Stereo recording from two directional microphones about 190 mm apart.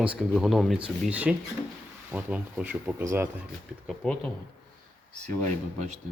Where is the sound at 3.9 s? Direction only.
5° left (ahead or behind).